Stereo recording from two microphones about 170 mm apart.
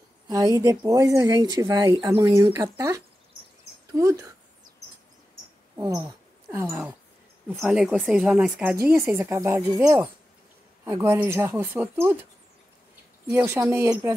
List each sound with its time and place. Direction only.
0.3 s speech: 20° right (ahead or behind)
5.8 s a sound: 25° right (ahead or behind)
7.4 s speech: 5° right (ahead or behind)
13.3 s speech: 15° right (ahead or behind)